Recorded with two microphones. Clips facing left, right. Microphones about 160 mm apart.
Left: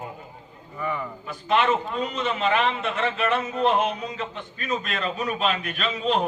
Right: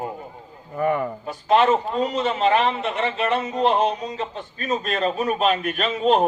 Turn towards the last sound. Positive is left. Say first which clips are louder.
# right 6 dB
turn(degrees=-50)  # may be behind; listen again after turning